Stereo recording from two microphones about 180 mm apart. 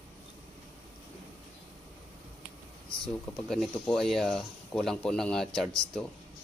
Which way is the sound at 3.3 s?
Centre (ahead or behind).